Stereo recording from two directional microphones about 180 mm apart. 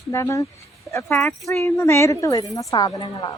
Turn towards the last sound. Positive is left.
turn(degrees=20)  # may be behind; listen again after turning